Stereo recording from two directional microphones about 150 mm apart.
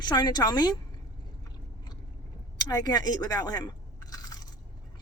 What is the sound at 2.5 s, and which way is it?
Crunch, 25° left (ahead or behind).